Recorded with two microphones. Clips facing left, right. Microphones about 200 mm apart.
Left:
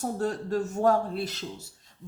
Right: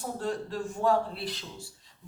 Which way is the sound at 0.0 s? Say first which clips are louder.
Left 3 dB; 45° left (ahead or behind).